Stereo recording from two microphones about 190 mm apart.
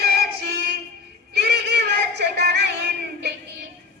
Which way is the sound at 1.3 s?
60° right (ahead or behind).